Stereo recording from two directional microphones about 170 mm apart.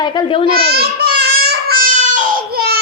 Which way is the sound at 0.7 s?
65° right (ahead or behind).